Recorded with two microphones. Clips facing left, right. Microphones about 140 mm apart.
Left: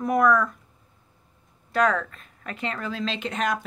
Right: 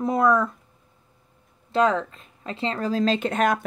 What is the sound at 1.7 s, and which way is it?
Speech, 25° right (ahead or behind).